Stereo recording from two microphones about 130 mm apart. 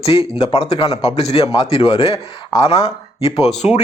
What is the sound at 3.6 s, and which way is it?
Speech, 50° left (ahead or behind).